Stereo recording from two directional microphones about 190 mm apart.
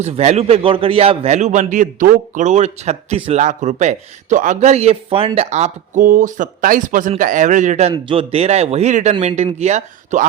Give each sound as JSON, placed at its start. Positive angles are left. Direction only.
{"t": 0.0, "sound": "a man's voice", "side_deg": -35}